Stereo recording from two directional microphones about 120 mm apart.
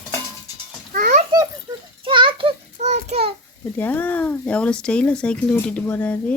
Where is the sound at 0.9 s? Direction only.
90° right.